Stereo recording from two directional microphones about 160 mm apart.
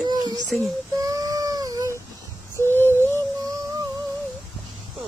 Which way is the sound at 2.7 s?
15° left (ahead or behind).